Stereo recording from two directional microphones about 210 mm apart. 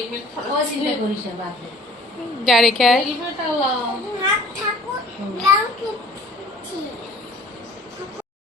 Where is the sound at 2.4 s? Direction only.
Centre (ahead or behind).